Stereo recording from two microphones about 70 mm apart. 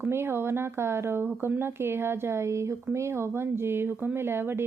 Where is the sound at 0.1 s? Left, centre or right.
Right.